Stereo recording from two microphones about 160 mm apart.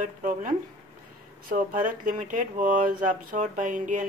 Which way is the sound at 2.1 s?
55° right (ahead or behind).